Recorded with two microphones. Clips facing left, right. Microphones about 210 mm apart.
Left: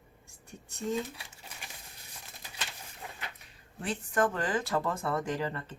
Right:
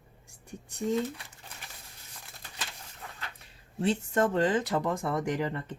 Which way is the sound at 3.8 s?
25° right (ahead or behind).